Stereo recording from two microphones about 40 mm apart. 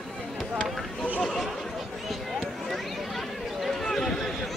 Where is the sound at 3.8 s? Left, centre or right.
Centre.